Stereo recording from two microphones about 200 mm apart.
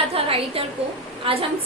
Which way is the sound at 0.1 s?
30° right (ahead or behind).